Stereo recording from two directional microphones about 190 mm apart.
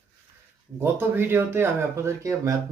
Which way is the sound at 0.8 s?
10° right (ahead or behind).